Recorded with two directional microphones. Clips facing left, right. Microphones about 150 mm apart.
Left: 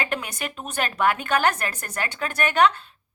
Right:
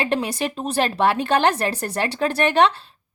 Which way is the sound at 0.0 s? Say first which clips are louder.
Right 7 dB; 30° right (ahead or behind).